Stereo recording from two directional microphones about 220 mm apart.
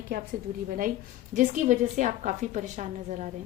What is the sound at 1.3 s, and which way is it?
A woman's voice, 35° right (ahead or behind).